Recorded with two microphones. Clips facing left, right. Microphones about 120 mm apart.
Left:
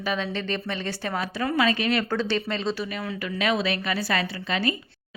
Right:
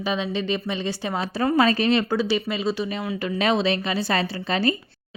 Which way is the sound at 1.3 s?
35° right (ahead or behind).